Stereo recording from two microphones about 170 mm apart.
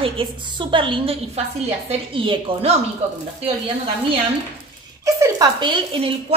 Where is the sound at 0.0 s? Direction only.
30° right (ahead or behind).